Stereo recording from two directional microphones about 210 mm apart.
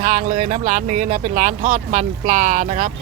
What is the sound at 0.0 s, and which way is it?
Speech, 40° right (ahead or behind).